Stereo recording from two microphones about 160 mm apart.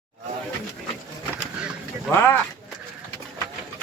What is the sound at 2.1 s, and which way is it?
Speech, 15° left (ahead or behind).